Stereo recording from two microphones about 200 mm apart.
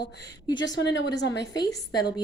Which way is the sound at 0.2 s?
20° left (ahead or behind).